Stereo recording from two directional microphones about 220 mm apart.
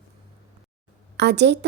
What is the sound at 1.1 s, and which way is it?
Speech, 50° right (ahead or behind).